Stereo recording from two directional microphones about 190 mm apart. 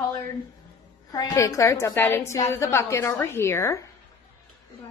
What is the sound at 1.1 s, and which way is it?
A woman's voice, 15° left (ahead or behind).